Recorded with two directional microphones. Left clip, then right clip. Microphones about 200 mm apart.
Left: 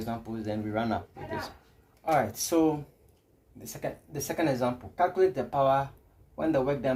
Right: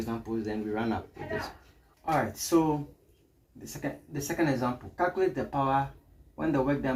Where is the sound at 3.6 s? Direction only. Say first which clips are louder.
Left 1 dB; 55° left (ahead or behind).